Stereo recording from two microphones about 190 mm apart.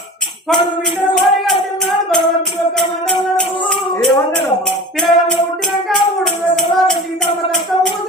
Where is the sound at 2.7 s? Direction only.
5° left (ahead or behind).